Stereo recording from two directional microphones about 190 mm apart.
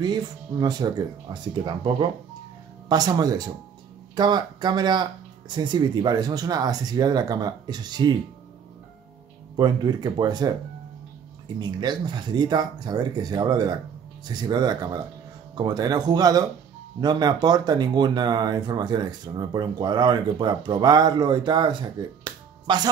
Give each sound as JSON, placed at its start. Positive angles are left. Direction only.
{"t": 0.0, "sound": "speech", "side_deg": -20}
{"t": 9.6, "sound": "speech", "side_deg": -20}